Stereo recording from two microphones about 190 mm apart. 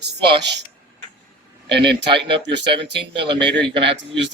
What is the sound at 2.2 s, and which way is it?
A man's voice, 65° right (ahead or behind).